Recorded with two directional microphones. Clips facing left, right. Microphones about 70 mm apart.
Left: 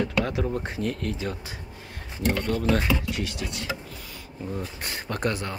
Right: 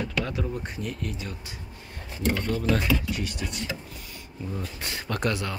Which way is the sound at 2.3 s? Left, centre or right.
Left.